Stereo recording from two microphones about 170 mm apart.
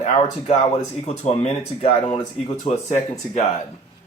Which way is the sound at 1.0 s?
40° left (ahead or behind).